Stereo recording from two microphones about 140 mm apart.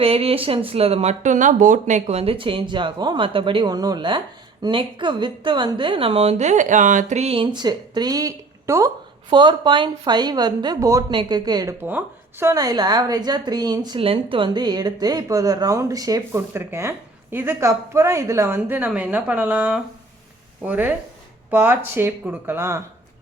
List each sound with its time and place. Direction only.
0.0 s speech: 45° right (ahead or behind); by 8.9 s 25° right (ahead or behind)
9.3 s speech: 35° right (ahead or behind)
11.8 s speech: 15° right (ahead or behind); by 14.0 s 30° right (ahead or behind)
14.0 s speech: 40° right (ahead or behind); by 22.8 s 20° right (ahead or behind)